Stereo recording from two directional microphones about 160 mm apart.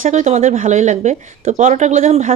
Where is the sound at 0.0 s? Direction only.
50° right (ahead or behind).